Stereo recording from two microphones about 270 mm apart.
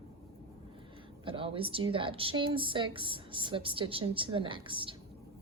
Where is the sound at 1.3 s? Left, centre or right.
Centre.